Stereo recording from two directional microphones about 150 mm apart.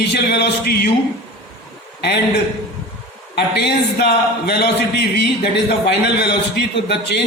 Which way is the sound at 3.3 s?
90° left.